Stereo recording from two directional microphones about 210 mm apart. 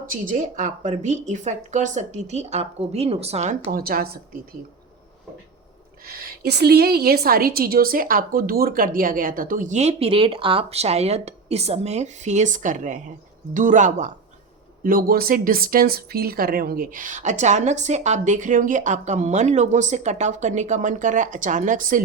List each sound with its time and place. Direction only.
0.0 s speech: 40° right (ahead or behind)
6.1 s speech: 45° right (ahead or behind)